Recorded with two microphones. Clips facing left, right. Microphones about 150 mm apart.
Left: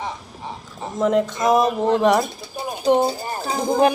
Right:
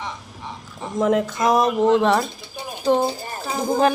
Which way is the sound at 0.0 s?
35° left (ahead or behind).